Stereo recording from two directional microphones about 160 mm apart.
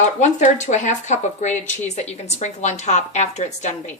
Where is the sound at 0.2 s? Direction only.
50° left (ahead or behind).